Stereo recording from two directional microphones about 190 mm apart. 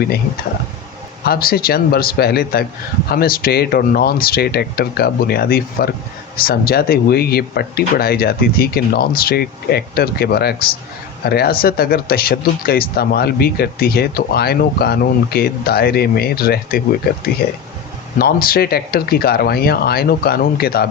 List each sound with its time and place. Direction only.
1.2 s speech: 50° left (ahead or behind)